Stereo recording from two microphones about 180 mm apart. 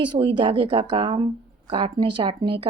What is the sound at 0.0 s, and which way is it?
Speech, 30° right (ahead or behind).